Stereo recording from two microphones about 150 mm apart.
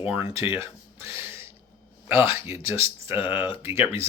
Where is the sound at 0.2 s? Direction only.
40° left (ahead or behind).